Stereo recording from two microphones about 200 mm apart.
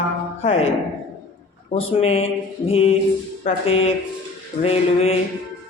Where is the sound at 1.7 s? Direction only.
30° left (ahead or behind).